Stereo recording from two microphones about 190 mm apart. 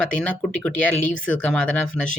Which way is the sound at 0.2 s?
5° left (ahead or behind).